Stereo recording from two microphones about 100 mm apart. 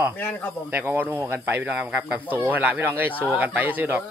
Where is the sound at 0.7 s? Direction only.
20° right (ahead or behind).